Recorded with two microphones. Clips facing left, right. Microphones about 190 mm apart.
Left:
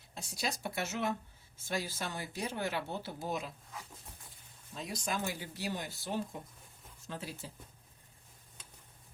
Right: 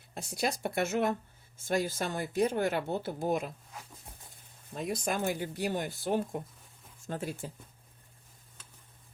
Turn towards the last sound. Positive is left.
turn(degrees=-50)  # may be behind; listen again after turning